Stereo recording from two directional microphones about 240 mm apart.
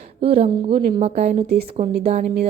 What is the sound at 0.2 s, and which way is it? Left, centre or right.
A woman's voice, right.